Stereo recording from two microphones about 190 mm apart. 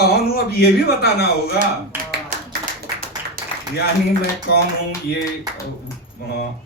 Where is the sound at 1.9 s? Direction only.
10° right (ahead or behind).